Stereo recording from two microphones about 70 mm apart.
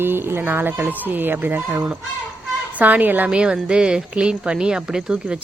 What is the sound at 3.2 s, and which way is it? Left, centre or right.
Speech, centre.